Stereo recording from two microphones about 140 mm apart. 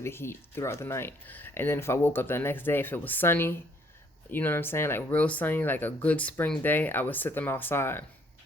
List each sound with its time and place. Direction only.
0.0 s speech: 15° left (ahead or behind)